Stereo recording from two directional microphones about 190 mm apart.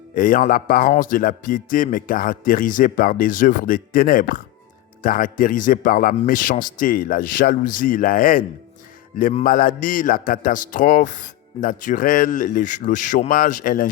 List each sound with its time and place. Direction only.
0.1 s speech: 45° left (ahead or behind)